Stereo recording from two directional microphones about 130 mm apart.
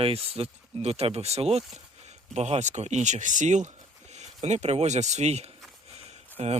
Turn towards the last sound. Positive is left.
turn(degrees=-55)  # may be behind; listen again after turning